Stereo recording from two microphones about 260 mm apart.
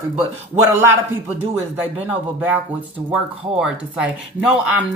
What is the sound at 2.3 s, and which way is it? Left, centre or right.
Speech, centre.